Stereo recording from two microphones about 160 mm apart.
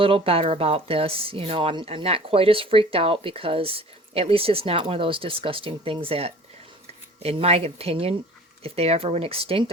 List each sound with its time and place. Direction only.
0.0 s speech: 35° right (ahead or behind)